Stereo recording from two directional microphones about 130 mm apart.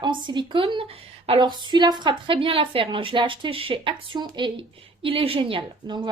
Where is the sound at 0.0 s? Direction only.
35° right (ahead or behind).